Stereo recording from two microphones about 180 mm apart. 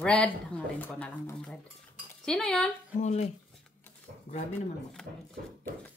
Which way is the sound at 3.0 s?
40° left (ahead or behind).